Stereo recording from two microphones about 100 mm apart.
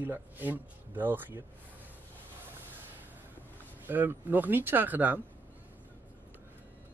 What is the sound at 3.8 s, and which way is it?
Speech, 20° right (ahead or behind).